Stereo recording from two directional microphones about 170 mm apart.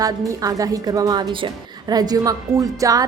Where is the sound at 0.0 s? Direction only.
20° right (ahead or behind).